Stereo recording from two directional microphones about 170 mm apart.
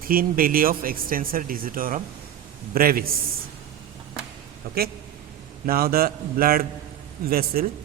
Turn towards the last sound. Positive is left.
turn(degrees=-60)  # may be behind; listen again after turning